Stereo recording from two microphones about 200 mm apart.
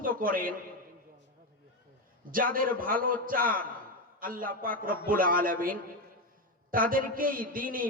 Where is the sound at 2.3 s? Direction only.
45° right (ahead or behind).